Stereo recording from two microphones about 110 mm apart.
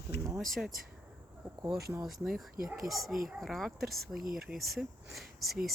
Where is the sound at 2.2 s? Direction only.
5° right (ahead or behind).